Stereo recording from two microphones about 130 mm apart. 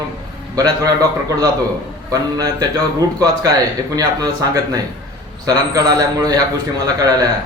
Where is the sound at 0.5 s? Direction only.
25° right (ahead or behind).